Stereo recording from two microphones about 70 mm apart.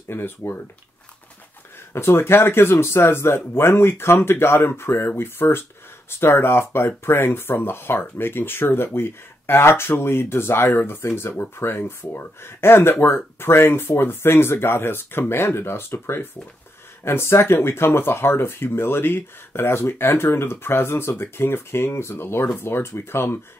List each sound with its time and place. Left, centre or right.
0.1 s speech: left
2.0 s speech: left